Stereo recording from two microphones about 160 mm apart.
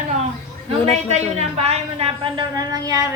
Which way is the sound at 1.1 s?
45° right (ahead or behind).